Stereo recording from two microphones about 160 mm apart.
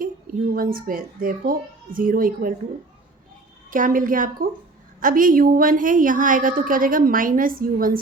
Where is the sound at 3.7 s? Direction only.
60° right (ahead or behind).